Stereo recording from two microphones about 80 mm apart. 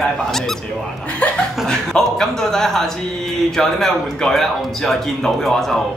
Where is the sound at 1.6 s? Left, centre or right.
Centre.